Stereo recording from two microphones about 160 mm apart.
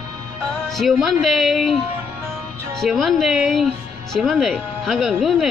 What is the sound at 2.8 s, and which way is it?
Speech, centre (ahead or behind).